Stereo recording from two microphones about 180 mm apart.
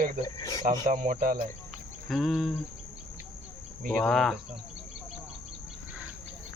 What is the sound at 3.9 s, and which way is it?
Speech, 5° left (ahead or behind).